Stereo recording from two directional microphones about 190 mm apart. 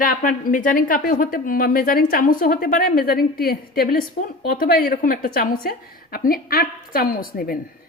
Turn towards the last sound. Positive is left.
turn(degrees=50)  # may be behind; listen again after turning